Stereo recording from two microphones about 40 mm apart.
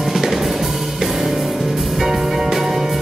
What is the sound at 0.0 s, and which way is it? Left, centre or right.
Music, centre.